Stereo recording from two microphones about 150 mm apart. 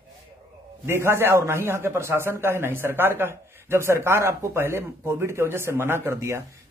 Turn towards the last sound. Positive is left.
turn(degrees=-15)  # may be behind; listen again after turning